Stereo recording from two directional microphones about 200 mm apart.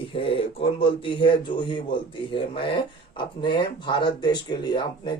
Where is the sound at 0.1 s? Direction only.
25° left (ahead or behind).